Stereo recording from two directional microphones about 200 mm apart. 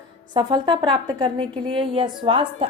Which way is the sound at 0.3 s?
20° right (ahead or behind).